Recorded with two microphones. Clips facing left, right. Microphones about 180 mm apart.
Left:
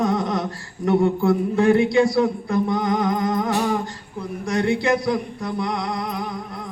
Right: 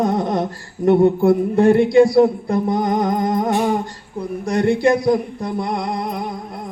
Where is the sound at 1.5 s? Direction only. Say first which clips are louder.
Right 5 dB; 50° right (ahead or behind).